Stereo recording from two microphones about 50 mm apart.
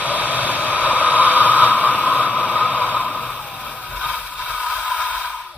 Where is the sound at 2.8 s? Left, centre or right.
Left.